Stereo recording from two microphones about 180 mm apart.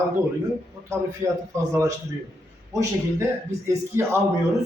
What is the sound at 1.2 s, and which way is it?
Speech, 20° right (ahead or behind).